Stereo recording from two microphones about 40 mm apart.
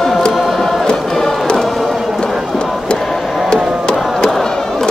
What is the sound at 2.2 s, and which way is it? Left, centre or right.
Run, left.